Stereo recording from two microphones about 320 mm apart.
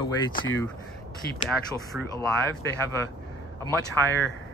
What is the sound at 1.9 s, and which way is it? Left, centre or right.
Speech, centre.